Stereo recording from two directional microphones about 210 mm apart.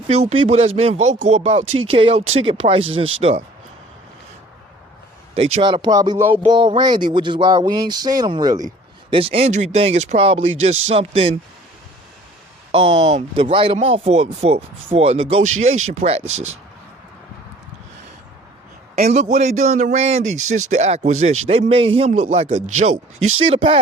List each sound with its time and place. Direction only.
0.1 s speech: 30° right (ahead or behind)
5.5 s speech: 20° right (ahead or behind)
12.7 s speech: 25° right (ahead or behind)
19.0 s speech: 35° right (ahead or behind)